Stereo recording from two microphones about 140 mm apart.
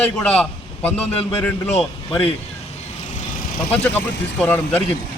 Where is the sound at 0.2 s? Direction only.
10° left (ahead or behind).